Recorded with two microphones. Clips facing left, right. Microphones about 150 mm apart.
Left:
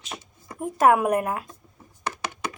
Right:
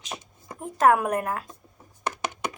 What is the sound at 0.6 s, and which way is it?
Speech, 10° left (ahead or behind).